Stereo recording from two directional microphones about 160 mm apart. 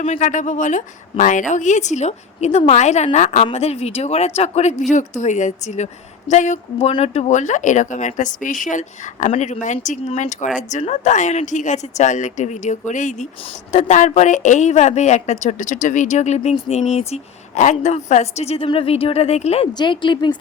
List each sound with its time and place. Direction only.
0.0 s a woman's voice: 50° left (ahead or behind)
19.7 s a woman's voice: 30° left (ahead or behind)